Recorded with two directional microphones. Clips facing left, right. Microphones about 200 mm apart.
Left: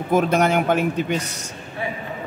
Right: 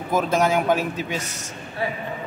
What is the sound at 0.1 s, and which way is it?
A man's voice, 65° left (ahead or behind).